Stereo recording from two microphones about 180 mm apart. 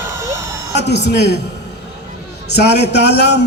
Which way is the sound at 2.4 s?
65° left (ahead or behind).